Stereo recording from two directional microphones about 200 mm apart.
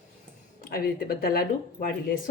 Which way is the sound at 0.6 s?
50° left (ahead or behind).